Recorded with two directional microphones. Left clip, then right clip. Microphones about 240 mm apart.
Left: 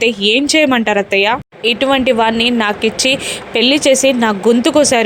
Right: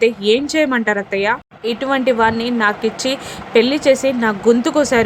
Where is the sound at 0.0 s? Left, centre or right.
Centre.